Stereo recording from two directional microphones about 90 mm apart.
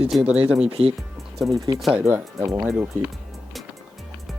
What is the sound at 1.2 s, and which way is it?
Music, centre (ahead or behind).